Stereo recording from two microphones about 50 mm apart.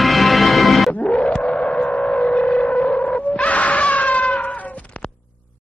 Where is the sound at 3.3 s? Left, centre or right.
Left.